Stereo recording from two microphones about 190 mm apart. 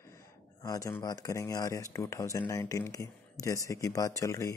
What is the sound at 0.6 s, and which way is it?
Speech, 15° left (ahead or behind).